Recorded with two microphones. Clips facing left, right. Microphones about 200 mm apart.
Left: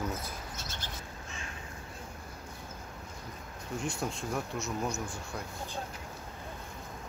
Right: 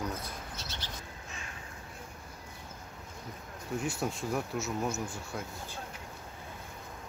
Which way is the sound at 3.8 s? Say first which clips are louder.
Even; 5° right (ahead or behind).